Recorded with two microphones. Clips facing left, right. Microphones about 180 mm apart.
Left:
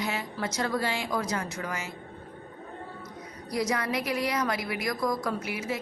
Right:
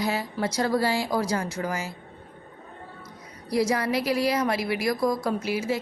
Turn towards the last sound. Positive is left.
turn(degrees=-30)  # may be behind; listen again after turning